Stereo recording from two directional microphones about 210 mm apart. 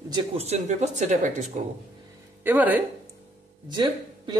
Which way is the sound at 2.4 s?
10° right (ahead or behind).